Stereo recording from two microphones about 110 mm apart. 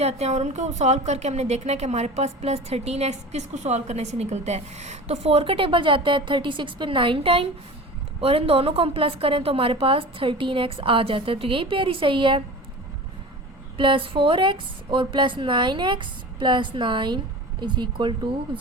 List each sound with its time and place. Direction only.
0.0 s a woman's voice: 75° right (ahead or behind); by 12.4 s 50° right (ahead or behind)
13.7 s a woman's voice: 50° right (ahead or behind)